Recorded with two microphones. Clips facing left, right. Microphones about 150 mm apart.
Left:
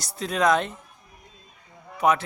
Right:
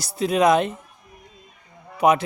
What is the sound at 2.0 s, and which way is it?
Speech, 15° right (ahead or behind).